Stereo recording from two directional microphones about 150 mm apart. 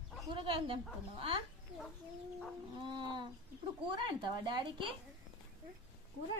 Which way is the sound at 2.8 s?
30° right (ahead or behind).